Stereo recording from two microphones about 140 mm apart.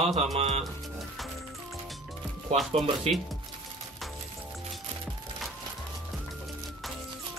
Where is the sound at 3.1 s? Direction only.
45° right (ahead or behind).